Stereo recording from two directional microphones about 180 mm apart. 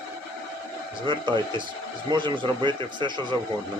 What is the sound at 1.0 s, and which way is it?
A man's voice, 25° right (ahead or behind).